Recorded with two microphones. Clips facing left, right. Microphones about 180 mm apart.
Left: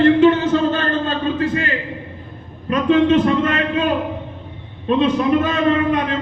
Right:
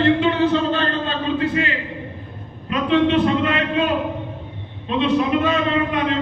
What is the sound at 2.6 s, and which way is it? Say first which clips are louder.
Speech: left 3 dB; 40° left (ahead or behind).